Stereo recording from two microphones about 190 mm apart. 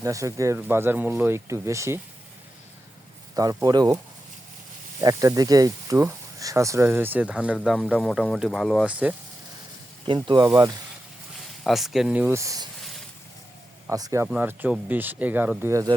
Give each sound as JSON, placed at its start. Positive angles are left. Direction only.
{"t": 0.0, "sound": "speech", "side_deg": -15}
{"t": 3.3, "sound": "speech", "side_deg": -20}
{"t": 4.9, "sound": "speech", "side_deg": -15}
{"t": 10.1, "sound": "speech", "side_deg": -25}
{"t": 11.6, "sound": "speech", "side_deg": 0}
{"t": 13.9, "sound": "speech", "side_deg": -15}